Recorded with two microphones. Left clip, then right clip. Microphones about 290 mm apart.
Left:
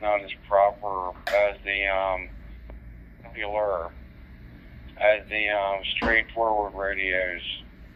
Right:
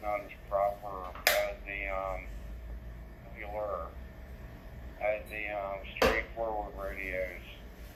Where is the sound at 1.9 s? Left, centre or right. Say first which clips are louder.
Left 9 dB; centre.